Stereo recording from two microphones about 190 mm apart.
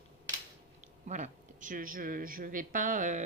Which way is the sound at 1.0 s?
40° right (ahead or behind).